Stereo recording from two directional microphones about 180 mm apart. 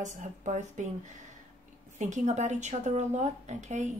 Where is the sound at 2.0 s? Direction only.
40° right (ahead or behind).